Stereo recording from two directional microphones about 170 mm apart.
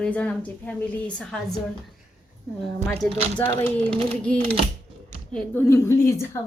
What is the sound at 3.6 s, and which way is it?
A woman's voice, 5° left (ahead or behind).